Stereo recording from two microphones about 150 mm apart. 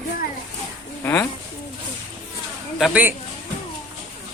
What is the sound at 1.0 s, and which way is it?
Speech, 15° left (ahead or behind).